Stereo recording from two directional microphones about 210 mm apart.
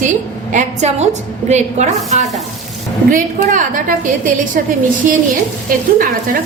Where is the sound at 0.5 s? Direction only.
35° right (ahead or behind).